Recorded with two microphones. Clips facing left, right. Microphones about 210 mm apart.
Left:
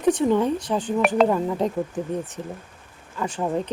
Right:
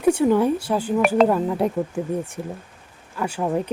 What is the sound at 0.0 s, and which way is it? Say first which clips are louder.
Speech: right 2 dB; 10° right (ahead or behind).